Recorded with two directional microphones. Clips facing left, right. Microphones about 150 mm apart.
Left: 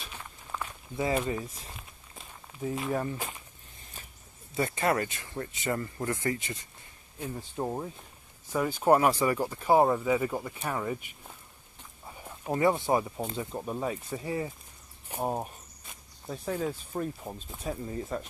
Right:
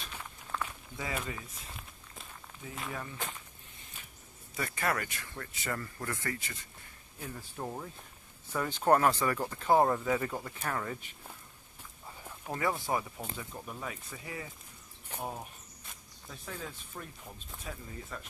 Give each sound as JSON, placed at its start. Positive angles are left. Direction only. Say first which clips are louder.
{"t": 0.0, "sound": "walk", "louder": "left 1 dB", "side_deg": 10}
{"t": 0.9, "sound": "speech", "louder": "left 9 dB", "side_deg": 30}
{"t": 2.6, "sound": "speech", "louder": "left 14 dB", "side_deg": 35}
{"t": 4.6, "sound": "speech", "louder": "left 6 dB", "side_deg": 25}
{"t": 8.5, "sound": "speech", "louder": "left 3 dB", "side_deg": 10}
{"t": 12.4, "sound": "speech", "louder": "left 7 dB", "side_deg": 25}
{"t": 16.3, "sound": "speech", "louder": "left 11 dB", "side_deg": 40}